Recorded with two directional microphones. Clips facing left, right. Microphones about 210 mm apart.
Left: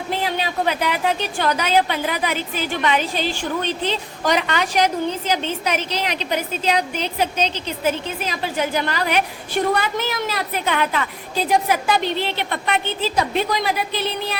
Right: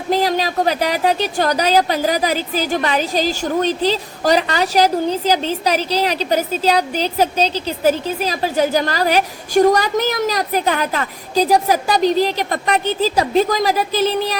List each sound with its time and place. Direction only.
0.1 s a woman's voice: 40° right (ahead or behind)